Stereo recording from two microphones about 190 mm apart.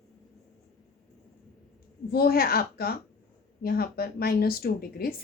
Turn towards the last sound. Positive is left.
turn(degrees=55)  # may be behind; listen again after turning